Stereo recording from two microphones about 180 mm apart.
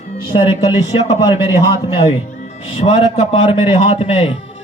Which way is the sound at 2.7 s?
35° left (ahead or behind).